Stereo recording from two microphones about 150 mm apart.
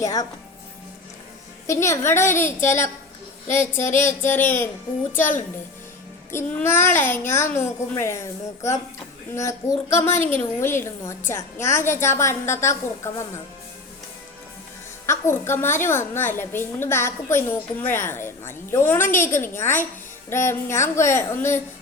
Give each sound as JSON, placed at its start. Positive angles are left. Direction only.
{"t": 0.0, "sound": "speech", "side_deg": 25}
{"t": 1.6, "sound": "a woman's voice", "side_deg": 20}
{"t": 3.4, "sound": "a sound", "side_deg": 15}
{"t": 3.8, "sound": "a woman's voice", "side_deg": 15}
{"t": 6.3, "sound": "a woman's voice", "side_deg": 15}
{"t": 15.0, "sound": "a woman's voice", "side_deg": 15}